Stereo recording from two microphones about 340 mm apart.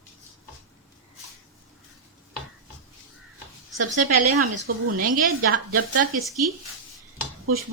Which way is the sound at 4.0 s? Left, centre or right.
Right.